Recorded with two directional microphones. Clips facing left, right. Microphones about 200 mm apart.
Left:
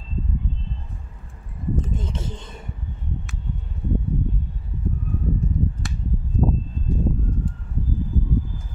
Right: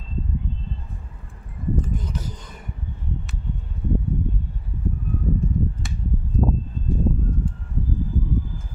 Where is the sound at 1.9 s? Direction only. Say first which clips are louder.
Even; 25° left (ahead or behind).